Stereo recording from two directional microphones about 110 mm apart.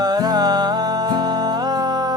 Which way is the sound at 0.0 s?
35° right (ahead or behind).